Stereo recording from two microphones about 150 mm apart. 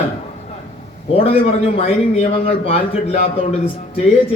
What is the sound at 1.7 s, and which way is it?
A man's voice, 45° left (ahead or behind).